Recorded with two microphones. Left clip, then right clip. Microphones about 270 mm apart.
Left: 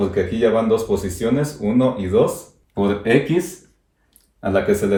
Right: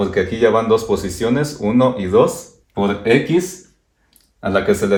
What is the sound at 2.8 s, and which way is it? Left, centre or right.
Speech, centre.